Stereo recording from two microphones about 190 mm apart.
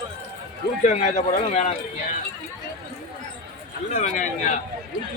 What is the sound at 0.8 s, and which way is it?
Speech, 40° left (ahead or behind).